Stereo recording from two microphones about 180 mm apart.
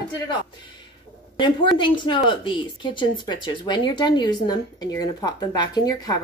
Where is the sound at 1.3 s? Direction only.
25° left (ahead or behind).